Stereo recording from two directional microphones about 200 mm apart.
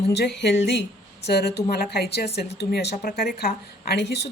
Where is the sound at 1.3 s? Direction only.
55° left (ahead or behind).